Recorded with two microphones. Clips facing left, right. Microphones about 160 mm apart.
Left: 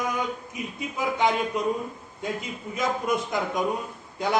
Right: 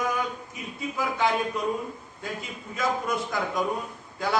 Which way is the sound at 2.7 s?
20° left (ahead or behind).